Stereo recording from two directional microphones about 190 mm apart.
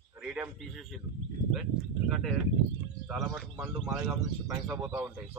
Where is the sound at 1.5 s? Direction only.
Centre (ahead or behind).